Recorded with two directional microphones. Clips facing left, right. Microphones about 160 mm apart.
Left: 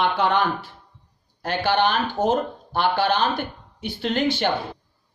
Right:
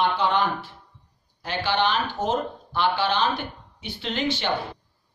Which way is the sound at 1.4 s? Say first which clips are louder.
Left 3 dB; 50° left (ahead or behind).